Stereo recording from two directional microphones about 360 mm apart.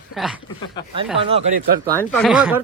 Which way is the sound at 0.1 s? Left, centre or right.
Centre.